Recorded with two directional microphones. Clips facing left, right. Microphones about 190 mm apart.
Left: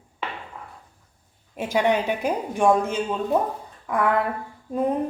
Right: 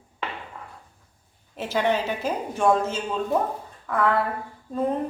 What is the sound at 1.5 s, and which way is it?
A woman's voice, 15° left (ahead or behind).